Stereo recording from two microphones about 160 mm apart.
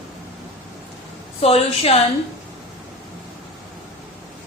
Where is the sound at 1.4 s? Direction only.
40° left (ahead or behind).